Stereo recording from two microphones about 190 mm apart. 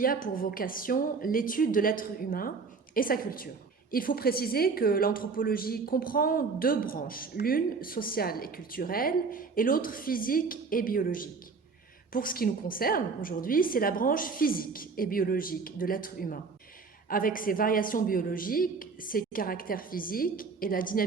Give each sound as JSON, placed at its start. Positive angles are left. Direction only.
{"t": 0.0, "sound": "a woman's voice", "side_deg": 50}